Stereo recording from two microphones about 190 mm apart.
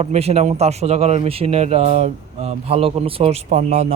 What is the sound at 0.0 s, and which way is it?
A man's voice, 35° right (ahead or behind).